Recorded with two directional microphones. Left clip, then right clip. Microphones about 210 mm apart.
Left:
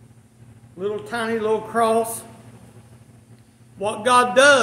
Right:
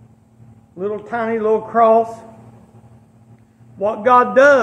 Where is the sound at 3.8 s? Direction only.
25° left (ahead or behind).